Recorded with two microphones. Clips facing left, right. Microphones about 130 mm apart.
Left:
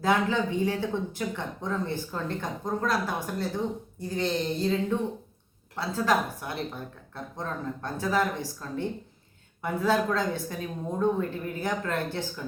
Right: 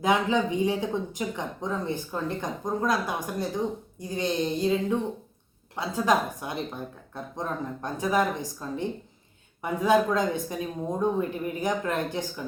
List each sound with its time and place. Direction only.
0.0 s speech: 15° right (ahead or behind)